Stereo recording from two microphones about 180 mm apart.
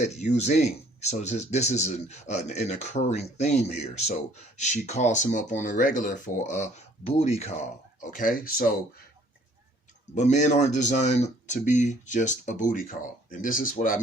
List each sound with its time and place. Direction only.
0.0 s speech: 40° left (ahead or behind)
8.1 s speech: 50° left (ahead or behind)
10.2 s speech: 40° left (ahead or behind)